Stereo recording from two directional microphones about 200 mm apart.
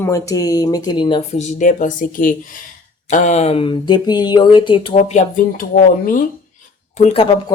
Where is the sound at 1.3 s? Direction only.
35° left (ahead or behind).